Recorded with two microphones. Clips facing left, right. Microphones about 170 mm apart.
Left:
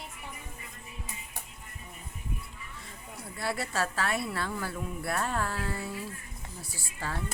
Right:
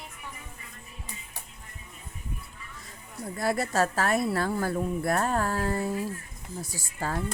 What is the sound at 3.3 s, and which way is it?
A woman's voice, 45° right (ahead or behind).